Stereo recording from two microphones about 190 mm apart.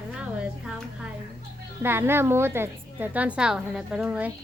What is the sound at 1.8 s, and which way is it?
A woman's voice, 10° right (ahead or behind).